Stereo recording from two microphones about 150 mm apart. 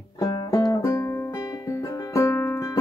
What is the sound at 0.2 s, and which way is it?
Music, 25° left (ahead or behind).